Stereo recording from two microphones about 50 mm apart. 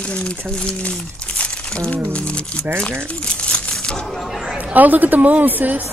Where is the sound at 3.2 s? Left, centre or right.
Left.